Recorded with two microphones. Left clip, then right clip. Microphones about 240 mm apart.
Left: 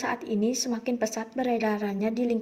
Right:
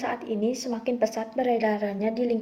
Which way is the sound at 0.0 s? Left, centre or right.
Left.